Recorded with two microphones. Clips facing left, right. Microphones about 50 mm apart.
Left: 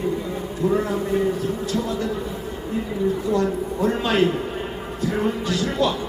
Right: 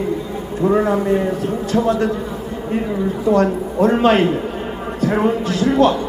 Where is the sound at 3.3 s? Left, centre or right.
Right.